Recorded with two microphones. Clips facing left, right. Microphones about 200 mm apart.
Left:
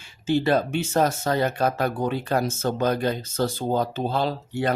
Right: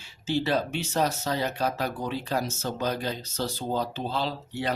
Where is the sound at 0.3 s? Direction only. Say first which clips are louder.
Left 5 dB; 50° left (ahead or behind).